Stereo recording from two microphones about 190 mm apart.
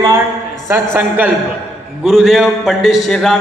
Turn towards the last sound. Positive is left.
turn(degrees=0)  # may be behind; listen again after turning